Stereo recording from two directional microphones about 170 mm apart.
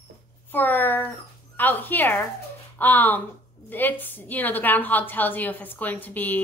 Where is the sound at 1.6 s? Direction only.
10° left (ahead or behind).